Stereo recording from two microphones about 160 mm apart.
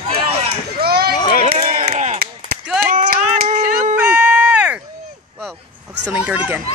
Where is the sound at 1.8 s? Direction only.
45° right (ahead or behind).